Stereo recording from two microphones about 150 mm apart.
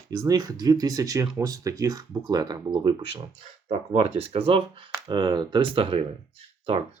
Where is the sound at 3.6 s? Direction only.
45° right (ahead or behind).